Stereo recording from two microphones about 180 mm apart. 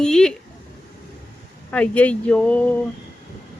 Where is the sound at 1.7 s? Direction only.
10° left (ahead or behind).